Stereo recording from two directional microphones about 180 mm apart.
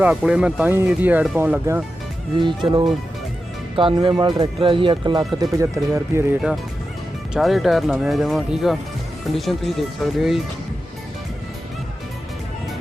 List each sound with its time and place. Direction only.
0.0 s speech: 5° right (ahead or behind)
2.6 s speech: 25° right (ahead or behind)
7.3 s speech: centre (ahead or behind)